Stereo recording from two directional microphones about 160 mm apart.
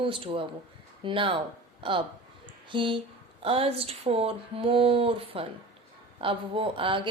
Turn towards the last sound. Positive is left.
turn(degrees=-35)  # may be behind; listen again after turning